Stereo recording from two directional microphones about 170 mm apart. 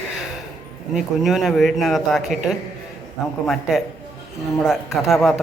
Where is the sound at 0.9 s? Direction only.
Centre (ahead or behind).